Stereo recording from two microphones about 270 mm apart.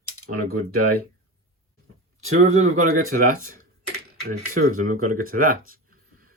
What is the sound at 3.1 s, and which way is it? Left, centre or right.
Speech, right.